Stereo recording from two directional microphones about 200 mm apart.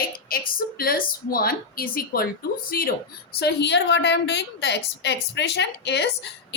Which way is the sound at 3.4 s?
55° left (ahead or behind).